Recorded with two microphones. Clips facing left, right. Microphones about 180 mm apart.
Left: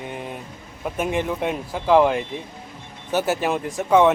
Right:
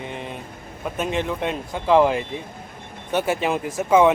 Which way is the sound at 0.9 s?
10° left (ahead or behind).